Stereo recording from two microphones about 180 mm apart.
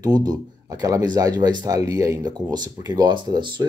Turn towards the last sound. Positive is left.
turn(degrees=-25)  # may be behind; listen again after turning